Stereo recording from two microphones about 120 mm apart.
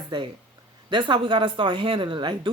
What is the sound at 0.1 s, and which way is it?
Speech, 40° right (ahead or behind).